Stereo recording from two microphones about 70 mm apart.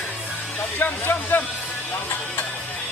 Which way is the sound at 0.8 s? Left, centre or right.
Left.